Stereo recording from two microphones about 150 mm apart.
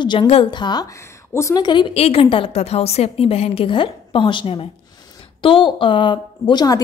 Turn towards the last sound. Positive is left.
turn(degrees=25)  # may be behind; listen again after turning